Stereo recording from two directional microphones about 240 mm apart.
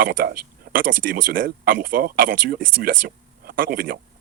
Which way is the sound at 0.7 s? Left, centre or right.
Right.